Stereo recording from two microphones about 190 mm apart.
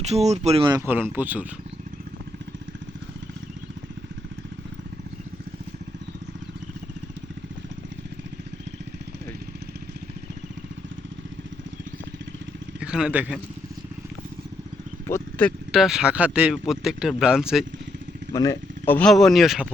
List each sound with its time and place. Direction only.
0.0 s speech: 35° right (ahead or behind)
0.7 s speech: 10° right (ahead or behind)
12.8 s a man's voice: 5° right (ahead or behind)
15.0 s speech: 10° left (ahead or behind)
18.3 s speech: 20° left (ahead or behind); by 19.6 s centre (ahead or behind)